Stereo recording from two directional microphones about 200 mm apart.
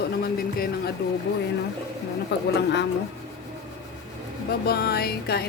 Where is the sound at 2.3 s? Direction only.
60° left (ahead or behind).